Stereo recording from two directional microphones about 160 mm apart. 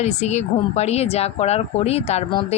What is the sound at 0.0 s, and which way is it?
Speech, 45° left (ahead or behind).